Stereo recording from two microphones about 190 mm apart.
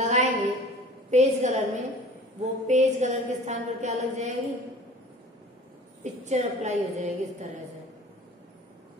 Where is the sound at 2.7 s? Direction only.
40° right (ahead or behind).